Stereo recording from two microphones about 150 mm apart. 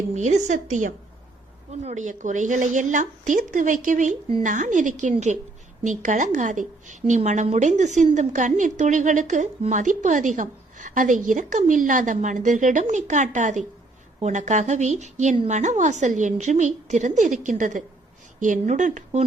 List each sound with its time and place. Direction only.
0.1 s a woman's voice: 50° right (ahead or behind)